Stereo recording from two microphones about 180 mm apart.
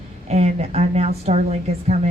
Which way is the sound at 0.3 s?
35° right (ahead or behind).